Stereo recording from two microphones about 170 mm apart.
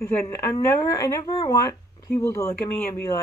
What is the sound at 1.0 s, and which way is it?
Speech, 20° left (ahead or behind).